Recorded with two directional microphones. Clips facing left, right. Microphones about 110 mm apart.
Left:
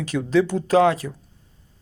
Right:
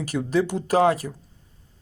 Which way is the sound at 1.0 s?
30° right (ahead or behind).